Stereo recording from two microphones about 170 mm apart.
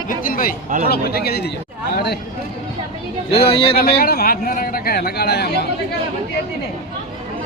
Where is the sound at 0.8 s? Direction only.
65° left (ahead or behind).